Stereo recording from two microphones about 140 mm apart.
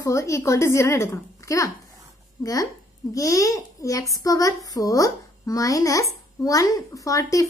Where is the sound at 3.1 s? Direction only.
25° left (ahead or behind).